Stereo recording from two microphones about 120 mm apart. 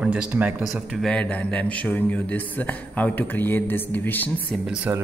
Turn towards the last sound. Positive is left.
turn(degrees=15)  # may be behind; listen again after turning